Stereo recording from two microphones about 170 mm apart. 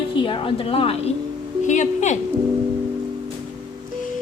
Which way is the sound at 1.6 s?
45° left (ahead or behind).